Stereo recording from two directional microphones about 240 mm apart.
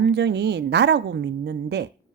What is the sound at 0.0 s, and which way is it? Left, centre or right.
A woman's voice, right.